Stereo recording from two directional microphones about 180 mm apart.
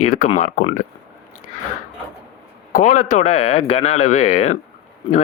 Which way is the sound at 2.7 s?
45° left (ahead or behind).